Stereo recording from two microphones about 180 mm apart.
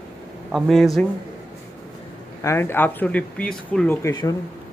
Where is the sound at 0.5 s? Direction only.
Centre (ahead or behind).